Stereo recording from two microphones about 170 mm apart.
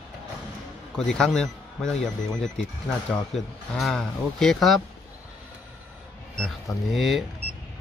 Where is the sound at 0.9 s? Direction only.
5° left (ahead or behind).